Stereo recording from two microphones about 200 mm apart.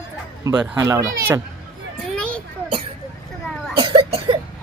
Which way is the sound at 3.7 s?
25° right (ahead or behind).